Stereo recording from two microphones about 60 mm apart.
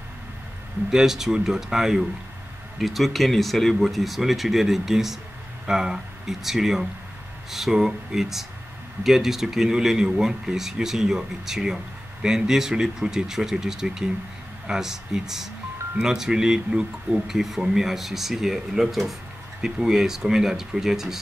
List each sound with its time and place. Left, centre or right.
0.8 s speech: centre